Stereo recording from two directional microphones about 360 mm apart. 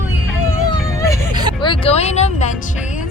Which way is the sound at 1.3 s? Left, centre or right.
Centre.